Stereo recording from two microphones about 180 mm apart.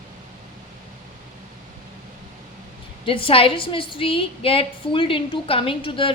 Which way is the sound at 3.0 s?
30° left (ahead or behind).